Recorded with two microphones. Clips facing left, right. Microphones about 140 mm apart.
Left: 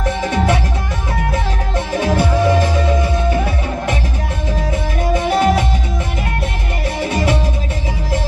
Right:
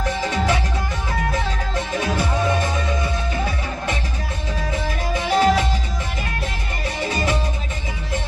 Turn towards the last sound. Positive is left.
turn(degrees=70)  # may be behind; listen again after turning